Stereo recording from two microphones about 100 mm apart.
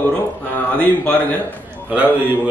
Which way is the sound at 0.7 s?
15° left (ahead or behind).